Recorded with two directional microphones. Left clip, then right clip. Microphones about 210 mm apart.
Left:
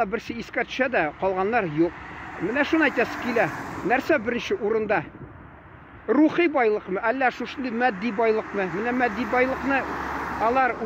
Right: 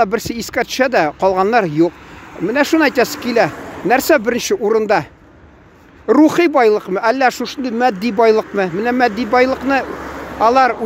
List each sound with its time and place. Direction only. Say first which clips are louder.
0.0 s speech: right 10 dB; 35° right (ahead or behind)
6.0 s speech: right 9 dB; 35° right (ahead or behind)